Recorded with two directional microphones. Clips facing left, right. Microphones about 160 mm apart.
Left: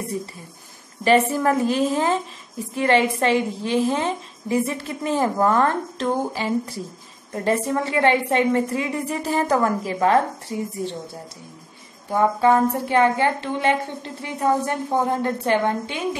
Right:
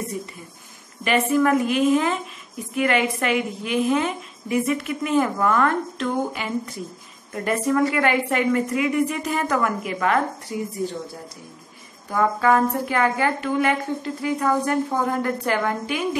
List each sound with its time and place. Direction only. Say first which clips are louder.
1.0 s a woman's voice: left 2 dB; 35° left (ahead or behind)
12.1 s a woman's voice: left 2 dB; 25° left (ahead or behind)